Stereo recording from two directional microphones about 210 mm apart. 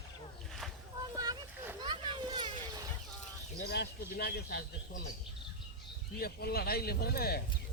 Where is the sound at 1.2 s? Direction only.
15° right (ahead or behind).